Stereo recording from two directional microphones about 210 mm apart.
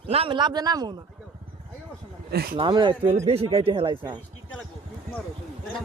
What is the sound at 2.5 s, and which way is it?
Speech, 20° right (ahead or behind).